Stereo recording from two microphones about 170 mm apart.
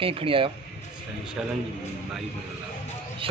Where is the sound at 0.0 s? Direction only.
35° right (ahead or behind).